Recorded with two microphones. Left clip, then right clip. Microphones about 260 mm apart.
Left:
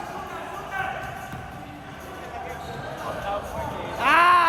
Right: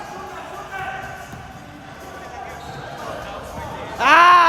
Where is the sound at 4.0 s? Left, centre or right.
Right.